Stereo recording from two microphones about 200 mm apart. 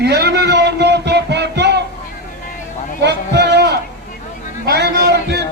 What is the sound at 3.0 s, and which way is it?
Speech, 55° right (ahead or behind).